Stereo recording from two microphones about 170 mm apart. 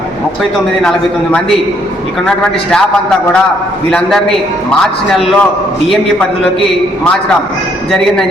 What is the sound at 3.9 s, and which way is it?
A man's voice, 5° left (ahead or behind).